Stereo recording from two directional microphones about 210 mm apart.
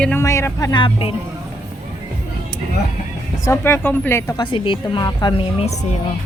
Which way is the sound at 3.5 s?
10° left (ahead or behind).